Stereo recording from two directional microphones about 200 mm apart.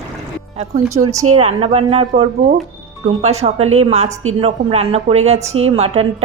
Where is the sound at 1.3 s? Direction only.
30° right (ahead or behind).